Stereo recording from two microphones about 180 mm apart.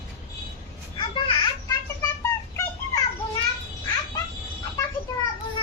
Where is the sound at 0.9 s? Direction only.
25° left (ahead or behind).